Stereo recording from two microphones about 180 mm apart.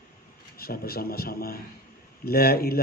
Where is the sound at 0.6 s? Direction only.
55° left (ahead or behind).